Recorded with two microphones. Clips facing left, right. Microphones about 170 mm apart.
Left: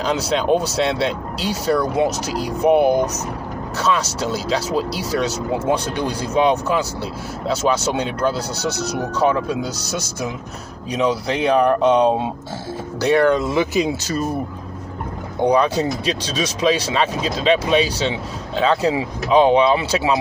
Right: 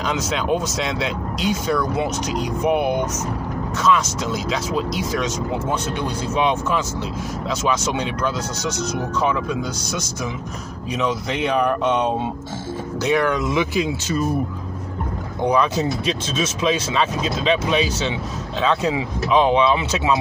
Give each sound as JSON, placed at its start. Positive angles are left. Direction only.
{"t": 0.0, "sound": "speech", "side_deg": 35}
{"t": 15.4, "sound": "speech", "side_deg": 30}